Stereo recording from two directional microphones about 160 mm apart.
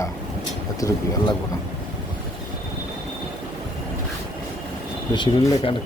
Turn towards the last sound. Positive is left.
turn(degrees=30)  # may be behind; listen again after turning